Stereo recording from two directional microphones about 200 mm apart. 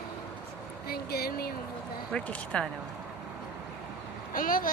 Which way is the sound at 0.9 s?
50° left (ahead or behind).